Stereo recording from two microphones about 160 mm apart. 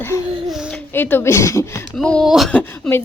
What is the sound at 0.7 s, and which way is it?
Speech, 10° left (ahead or behind).